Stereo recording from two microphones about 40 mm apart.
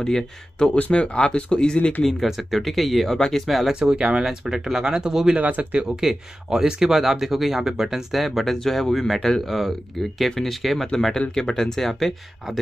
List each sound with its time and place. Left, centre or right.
0.0 s speech: centre
2.0 s speech: centre
3.2 s speech: centre
3.4 s speech: centre
3.9 s speech: right
5.4 s speech: right
5.9 s speech: centre
8.5 s speech: centre
11.1 s speech: centre